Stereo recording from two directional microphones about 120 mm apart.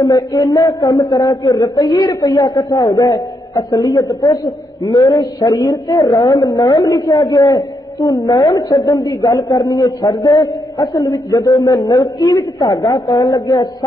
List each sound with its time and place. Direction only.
0.0 s a woman's voice: 30° left (ahead or behind)